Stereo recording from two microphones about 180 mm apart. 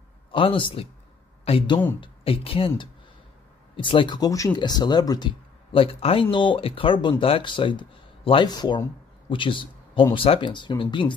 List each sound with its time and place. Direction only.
0.3 s speech: 30° left (ahead or behind)
3.7 s speech: 30° left (ahead or behind)